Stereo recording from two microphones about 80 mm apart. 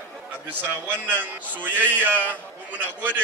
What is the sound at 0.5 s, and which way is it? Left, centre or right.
A man's voice, right.